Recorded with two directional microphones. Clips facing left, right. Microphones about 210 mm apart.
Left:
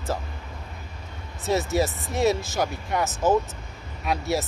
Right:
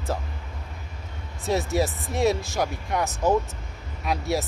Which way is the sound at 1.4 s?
Centre (ahead or behind).